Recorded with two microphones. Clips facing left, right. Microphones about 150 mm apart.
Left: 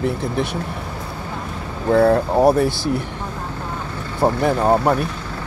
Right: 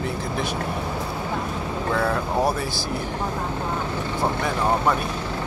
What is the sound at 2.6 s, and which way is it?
Speech, 65° left (ahead or behind).